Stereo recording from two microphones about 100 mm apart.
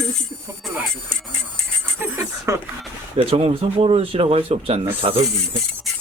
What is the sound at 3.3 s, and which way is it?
A man's voice, 75° right (ahead or behind).